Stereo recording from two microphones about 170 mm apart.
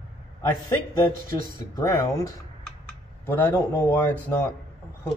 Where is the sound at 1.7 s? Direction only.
20° left (ahead or behind).